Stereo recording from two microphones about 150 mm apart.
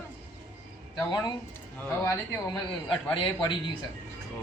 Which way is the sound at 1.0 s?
25° left (ahead or behind).